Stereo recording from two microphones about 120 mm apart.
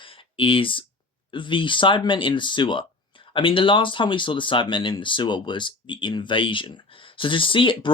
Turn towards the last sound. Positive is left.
turn(degrees=45)  # may be behind; listen again after turning